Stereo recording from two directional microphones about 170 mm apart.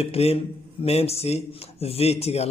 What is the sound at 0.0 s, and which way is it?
Speech, 35° left (ahead or behind).